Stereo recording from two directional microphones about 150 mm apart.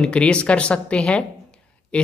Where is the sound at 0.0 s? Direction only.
5° left (ahead or behind).